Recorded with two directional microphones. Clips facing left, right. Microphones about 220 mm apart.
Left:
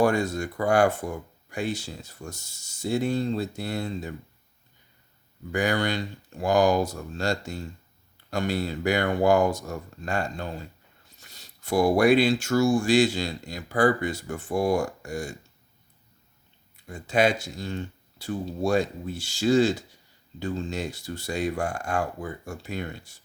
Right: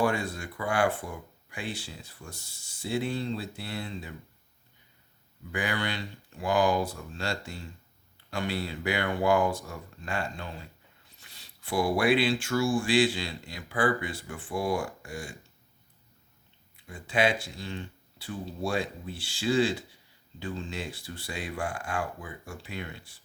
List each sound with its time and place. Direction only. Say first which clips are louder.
0.0 s speech: left 5 dB; 45° left (ahead or behind)
5.5 s speech: left 7 dB; 45° left (ahead or behind)
16.7 s speech: left 5 dB; 45° left (ahead or behind)